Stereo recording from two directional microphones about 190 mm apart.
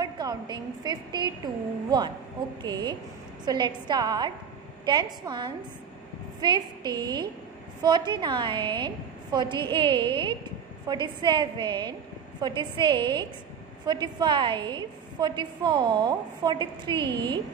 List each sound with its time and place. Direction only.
0.0 s a woman's voice: 20° right (ahead or behind)